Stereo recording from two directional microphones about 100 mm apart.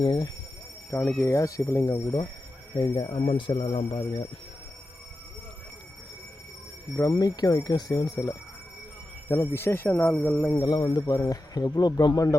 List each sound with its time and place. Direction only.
0.0 s speech: 50° left (ahead or behind)
1.2 s speech: 35° left (ahead or behind)
2.7 s speech: 45° left (ahead or behind); by 3.8 s 65° left (ahead or behind)
6.9 s speech: 35° left (ahead or behind)
9.3 s speech: 25° left (ahead or behind)
10.6 s speech: 45° left (ahead or behind)
11.0 s speech: 35° left (ahead or behind)